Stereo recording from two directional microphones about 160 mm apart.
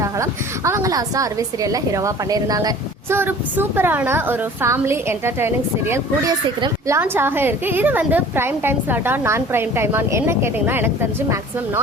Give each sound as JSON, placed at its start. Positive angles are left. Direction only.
{"t": 0.0, "sound": "a woman's voice", "side_deg": -20}